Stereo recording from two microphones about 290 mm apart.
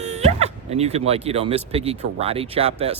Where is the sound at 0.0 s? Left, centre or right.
Right.